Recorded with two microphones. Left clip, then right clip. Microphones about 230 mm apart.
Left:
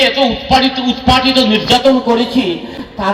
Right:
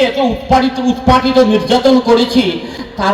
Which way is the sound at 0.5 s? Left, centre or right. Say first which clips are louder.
Right 2 dB; right.